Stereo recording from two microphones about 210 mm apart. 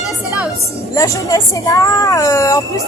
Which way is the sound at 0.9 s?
15° left (ahead or behind).